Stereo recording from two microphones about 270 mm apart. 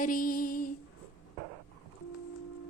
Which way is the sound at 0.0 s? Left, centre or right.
Left.